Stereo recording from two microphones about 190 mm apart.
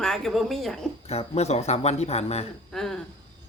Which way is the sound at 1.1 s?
35° left (ahead or behind).